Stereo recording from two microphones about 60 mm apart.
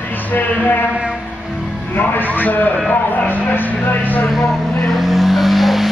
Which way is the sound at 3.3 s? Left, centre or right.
Left.